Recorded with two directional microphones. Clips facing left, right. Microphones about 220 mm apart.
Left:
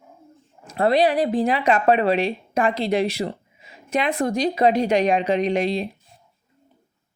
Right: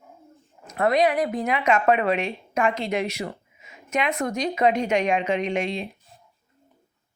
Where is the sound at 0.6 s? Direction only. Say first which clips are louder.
Left 2 dB; 30° left (ahead or behind).